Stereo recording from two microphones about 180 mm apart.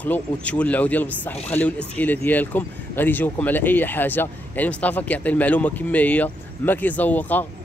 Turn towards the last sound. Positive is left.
turn(degrees=10)  # may be behind; listen again after turning